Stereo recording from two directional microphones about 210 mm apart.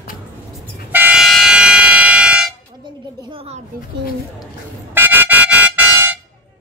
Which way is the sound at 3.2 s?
25° right (ahead or behind).